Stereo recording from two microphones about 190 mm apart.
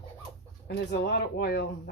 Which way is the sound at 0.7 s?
60° left (ahead or behind).